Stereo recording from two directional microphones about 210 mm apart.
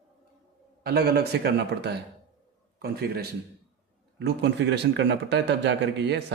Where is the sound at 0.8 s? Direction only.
50° right (ahead or behind).